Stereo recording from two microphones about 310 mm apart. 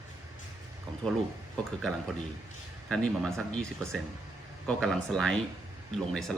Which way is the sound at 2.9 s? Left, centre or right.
Centre.